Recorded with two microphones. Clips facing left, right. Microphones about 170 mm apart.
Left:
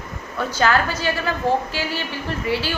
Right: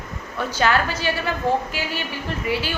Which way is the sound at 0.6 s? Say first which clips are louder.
Left 1 dB; 40° left (ahead or behind).